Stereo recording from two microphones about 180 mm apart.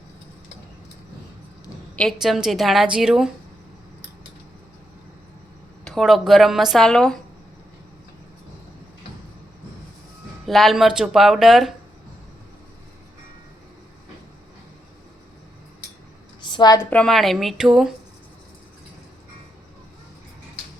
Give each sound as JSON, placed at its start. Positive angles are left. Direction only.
{"t": 2.0, "sound": "speech", "side_deg": 0}
{"t": 5.8, "sound": "speech", "side_deg": 0}
{"t": 10.4, "sound": "speech", "side_deg": 0}
{"t": 16.4, "sound": "a sound", "side_deg": 25}
{"t": 16.9, "sound": "speech", "side_deg": 5}